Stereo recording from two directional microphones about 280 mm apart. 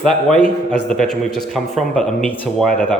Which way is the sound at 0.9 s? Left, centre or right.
Centre.